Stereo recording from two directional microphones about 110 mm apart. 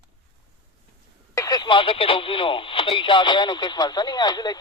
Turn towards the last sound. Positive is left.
turn(degrees=35)  # may be behind; listen again after turning